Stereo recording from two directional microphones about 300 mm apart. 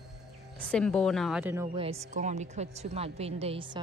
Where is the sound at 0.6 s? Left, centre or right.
Centre.